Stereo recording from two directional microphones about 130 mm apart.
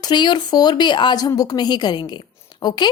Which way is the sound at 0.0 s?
35° left (ahead or behind).